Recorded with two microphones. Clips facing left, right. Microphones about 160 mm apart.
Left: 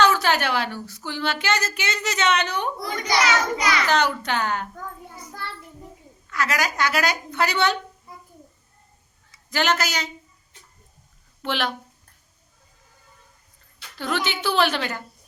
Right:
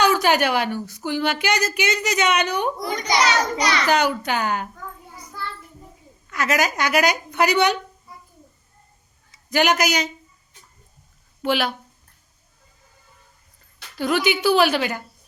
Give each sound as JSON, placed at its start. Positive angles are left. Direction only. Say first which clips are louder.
{"t": 0.0, "sound": "a woman's voice", "louder": "right 2 dB", "side_deg": -15}
{"t": 3.2, "sound": "a child's voice", "louder": "right 1 dB", "side_deg": -35}
{"t": 3.8, "sound": "a woman's voice", "louder": "right 2 dB", "side_deg": -10}
{"t": 6.3, "sound": "a woman's voice", "louder": "right 3 dB", "side_deg": -20}
{"t": 9.5, "sound": "a woman's voice", "louder": "right 4 dB", "side_deg": -15}
{"t": 11.4, "sound": "a woman's voice", "louder": "right 4 dB", "side_deg": -10}
{"t": 14.0, "sound": "a woman's voice", "louder": "right 6 dB", "side_deg": -10}